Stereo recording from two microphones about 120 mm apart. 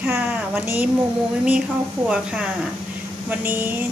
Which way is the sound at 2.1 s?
10° right (ahead or behind).